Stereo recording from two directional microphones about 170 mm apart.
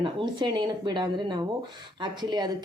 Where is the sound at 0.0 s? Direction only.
30° right (ahead or behind).